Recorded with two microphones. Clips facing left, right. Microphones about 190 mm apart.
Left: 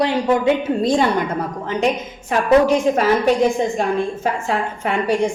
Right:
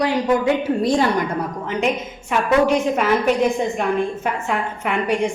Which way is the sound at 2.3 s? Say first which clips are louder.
Left 3 dB; 35° left (ahead or behind).